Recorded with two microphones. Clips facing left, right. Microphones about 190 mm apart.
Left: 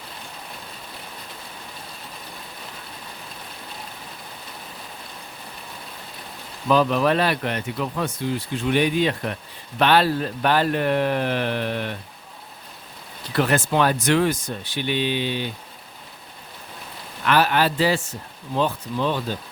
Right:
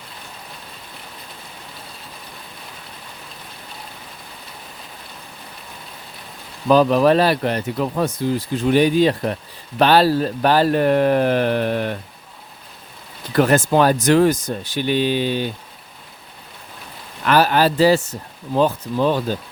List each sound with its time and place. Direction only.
6.7 s speech: 40° right (ahead or behind)
13.3 s speech: 45° right (ahead or behind)
17.2 s speech: 40° right (ahead or behind)